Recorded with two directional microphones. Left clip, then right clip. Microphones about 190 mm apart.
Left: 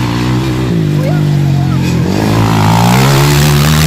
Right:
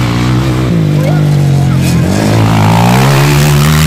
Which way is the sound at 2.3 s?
5° right (ahead or behind).